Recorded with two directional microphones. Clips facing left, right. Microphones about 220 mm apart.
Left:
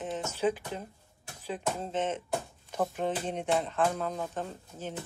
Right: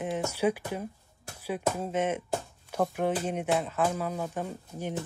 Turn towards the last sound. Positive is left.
turn(degrees=-10)  # may be behind; listen again after turning